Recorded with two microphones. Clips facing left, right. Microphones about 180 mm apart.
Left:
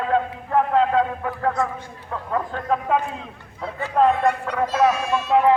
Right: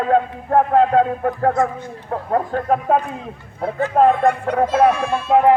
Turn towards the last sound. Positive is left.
turn(degrees=-50)  # may be behind; listen again after turning